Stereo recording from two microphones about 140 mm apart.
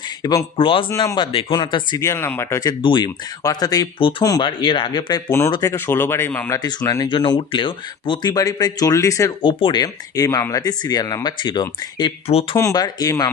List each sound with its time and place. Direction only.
0.2 s speech: 25° left (ahead or behind)
0.6 s speech: 40° left (ahead or behind)
2.0 s speech: 20° left (ahead or behind)
2.8 s speech: 35° left (ahead or behind); by 6.6 s 15° left (ahead or behind)
6.6 s speech: 30° left (ahead or behind)
9.4 s speech: 35° left (ahead or behind)